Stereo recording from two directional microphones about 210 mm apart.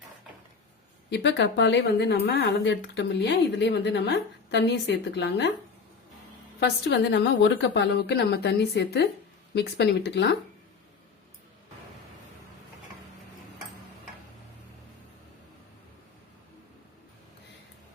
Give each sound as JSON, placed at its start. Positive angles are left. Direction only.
{"t": 1.1, "sound": "speech", "side_deg": 55}
{"t": 6.6, "sound": "speech", "side_deg": 50}